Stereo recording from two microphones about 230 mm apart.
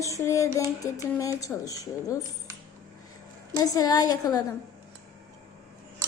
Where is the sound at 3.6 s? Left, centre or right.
Centre.